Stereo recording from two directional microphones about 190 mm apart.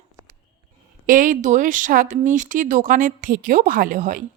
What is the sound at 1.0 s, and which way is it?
Speech, 45° right (ahead or behind).